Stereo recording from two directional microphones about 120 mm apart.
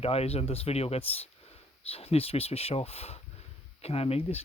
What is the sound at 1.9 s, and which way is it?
Speech, 55° left (ahead or behind).